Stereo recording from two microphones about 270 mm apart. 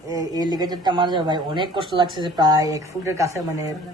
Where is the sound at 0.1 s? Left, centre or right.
Centre.